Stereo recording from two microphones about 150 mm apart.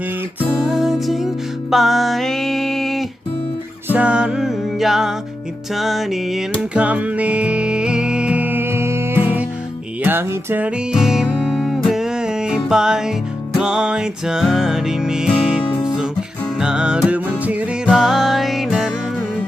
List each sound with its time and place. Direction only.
0.3 s music: 5° right (ahead or behind)